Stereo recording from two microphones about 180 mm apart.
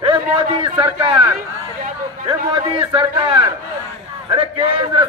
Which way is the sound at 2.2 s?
25° right (ahead or behind).